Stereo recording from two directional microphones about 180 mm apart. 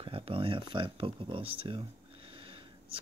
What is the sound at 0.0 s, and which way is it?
Speech, 30° right (ahead or behind).